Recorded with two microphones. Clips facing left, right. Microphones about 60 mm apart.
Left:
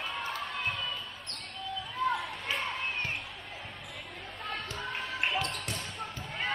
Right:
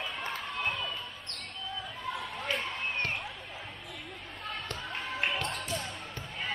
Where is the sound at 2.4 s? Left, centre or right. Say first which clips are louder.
Right 2 dB; centre.